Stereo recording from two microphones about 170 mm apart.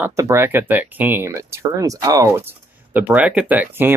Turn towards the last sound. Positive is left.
turn(degrees=-10)  # may be behind; listen again after turning